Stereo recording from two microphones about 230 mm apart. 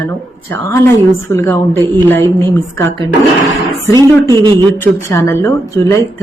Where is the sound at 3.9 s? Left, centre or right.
Centre.